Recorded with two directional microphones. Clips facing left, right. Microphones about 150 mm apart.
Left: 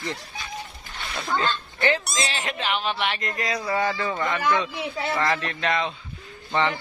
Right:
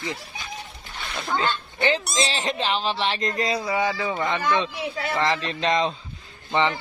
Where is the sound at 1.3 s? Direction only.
20° right (ahead or behind).